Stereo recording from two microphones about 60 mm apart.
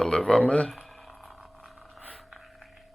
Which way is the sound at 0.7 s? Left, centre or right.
Centre.